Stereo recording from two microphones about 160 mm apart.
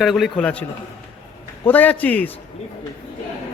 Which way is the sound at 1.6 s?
10° left (ahead or behind).